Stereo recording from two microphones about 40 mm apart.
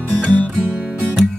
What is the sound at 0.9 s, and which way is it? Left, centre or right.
Music, right.